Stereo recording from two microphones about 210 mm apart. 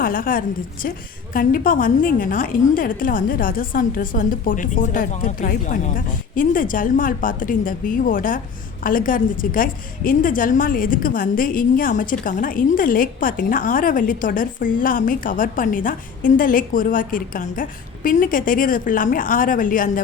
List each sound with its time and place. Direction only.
0.0 s a woman's voice: 40° left (ahead or behind)